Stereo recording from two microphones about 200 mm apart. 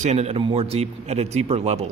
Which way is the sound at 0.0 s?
35° right (ahead or behind).